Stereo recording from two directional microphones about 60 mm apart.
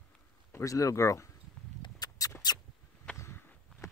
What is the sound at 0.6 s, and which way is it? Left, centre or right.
Speech, left.